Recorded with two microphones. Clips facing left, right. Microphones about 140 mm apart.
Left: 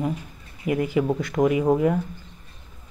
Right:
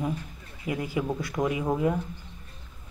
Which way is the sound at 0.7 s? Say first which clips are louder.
Left 7 dB; 55° left (ahead or behind).